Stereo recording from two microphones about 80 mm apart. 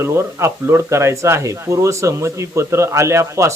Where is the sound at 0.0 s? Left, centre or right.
Right.